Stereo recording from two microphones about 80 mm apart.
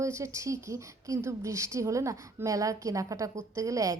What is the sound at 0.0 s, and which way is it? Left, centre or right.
Speech, right.